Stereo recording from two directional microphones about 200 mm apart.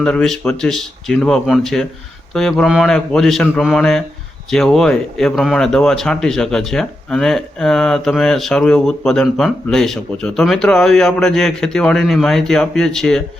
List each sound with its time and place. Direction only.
0.0 s speech: 5° left (ahead or behind)